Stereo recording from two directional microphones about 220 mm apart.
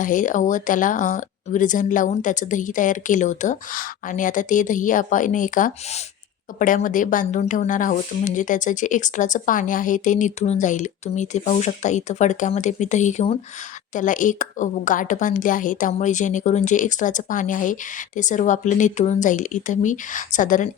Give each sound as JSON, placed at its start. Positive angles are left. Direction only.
{"t": 0.0, "sound": "speech", "side_deg": 35}